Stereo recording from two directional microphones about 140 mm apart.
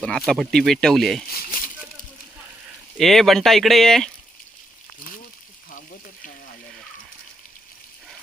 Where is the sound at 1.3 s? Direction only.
90° left.